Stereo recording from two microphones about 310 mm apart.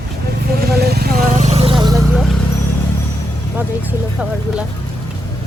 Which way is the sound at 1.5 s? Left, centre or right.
Centre.